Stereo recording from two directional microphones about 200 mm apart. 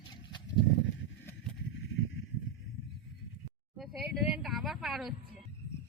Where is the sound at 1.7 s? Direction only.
70° left (ahead or behind).